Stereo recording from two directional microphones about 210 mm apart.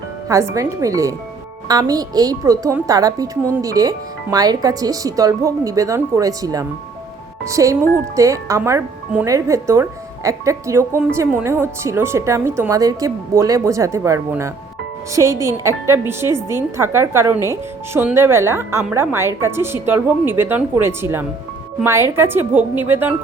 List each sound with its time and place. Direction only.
0.3 s speech: 15° right (ahead or behind)